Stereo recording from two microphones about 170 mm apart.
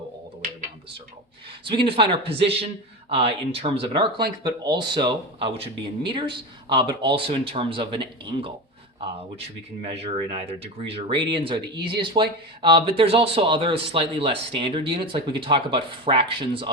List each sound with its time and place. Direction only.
1.6 s speech: 30° right (ahead or behind)
9.9 s speech: 35° right (ahead or behind)